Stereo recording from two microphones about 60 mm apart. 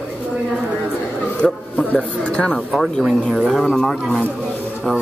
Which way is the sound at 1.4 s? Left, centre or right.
Left.